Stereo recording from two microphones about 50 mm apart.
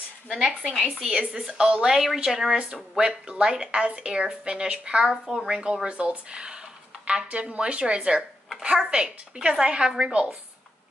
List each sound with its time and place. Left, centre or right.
0.4 s a woman's voice: centre
5.2 s a woman's voice: centre
5.9 s a woman's voice: right